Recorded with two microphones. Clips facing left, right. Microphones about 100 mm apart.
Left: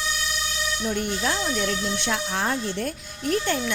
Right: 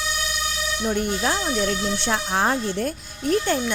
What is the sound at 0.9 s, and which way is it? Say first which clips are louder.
A woman's voice: right 3 dB; 40° right (ahead or behind).